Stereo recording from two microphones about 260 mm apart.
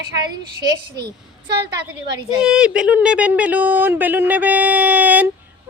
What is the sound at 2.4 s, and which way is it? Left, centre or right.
Speech, centre.